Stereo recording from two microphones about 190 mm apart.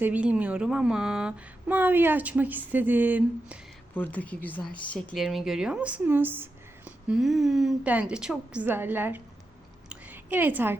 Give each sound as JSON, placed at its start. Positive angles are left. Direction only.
{"t": 0.0, "sound": "a woman's voice", "side_deg": -5}
{"t": 3.9, "sound": "speech", "side_deg": 10}
{"t": 9.9, "sound": "a sound", "side_deg": -10}